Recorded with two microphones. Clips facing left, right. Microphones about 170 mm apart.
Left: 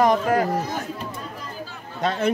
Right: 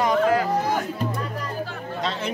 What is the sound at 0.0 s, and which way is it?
Chatter, 45° left (ahead or behind).